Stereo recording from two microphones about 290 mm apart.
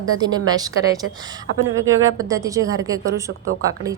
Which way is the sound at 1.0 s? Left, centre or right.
Right.